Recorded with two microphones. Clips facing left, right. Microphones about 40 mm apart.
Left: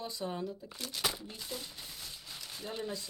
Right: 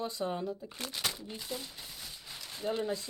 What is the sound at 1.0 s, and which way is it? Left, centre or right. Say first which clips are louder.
Speech: left 2 dB; centre.